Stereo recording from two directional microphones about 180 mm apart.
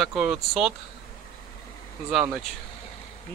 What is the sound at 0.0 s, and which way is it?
Speech, centre (ahead or behind).